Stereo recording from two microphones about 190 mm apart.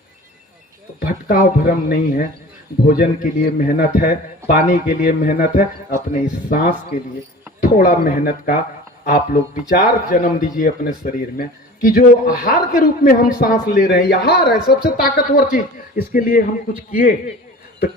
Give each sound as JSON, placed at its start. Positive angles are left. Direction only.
{"t": 0.9, "sound": "a man's voice", "side_deg": 50}
{"t": 7.6, "sound": "a man's voice", "side_deg": 50}